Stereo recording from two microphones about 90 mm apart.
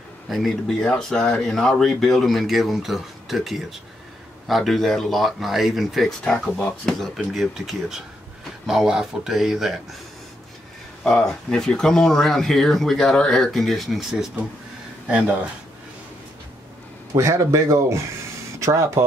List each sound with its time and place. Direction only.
0.3 s speech: centre (ahead or behind)
7.2 s speech: 5° right (ahead or behind)
11.1 s speech: 5° left (ahead or behind)
17.1 s speech: 35° right (ahead or behind)